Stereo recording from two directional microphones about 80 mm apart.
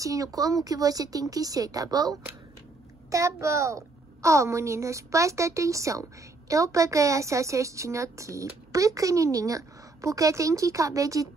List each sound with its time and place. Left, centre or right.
0.0 s speech: right
3.1 s a woman's voice: right